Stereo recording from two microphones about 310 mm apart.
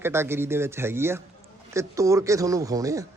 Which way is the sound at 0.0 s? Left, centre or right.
Centre.